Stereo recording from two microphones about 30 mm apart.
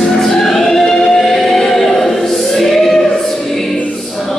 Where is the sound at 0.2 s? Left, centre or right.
Centre.